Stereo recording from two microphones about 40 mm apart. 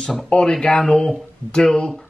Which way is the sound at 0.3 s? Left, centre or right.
Centre.